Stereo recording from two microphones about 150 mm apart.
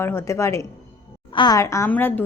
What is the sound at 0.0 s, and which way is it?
A woman's voice, 15° left (ahead or behind).